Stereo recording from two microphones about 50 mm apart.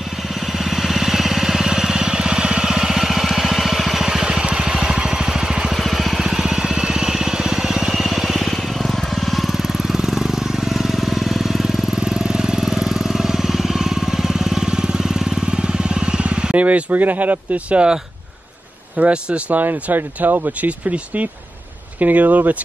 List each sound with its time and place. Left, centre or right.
0.7 s vehicle: centre; by 16.6 s right
16.9 s speech: right
18.9 s speech: right
19.6 s speech: right
20.6 s speech: right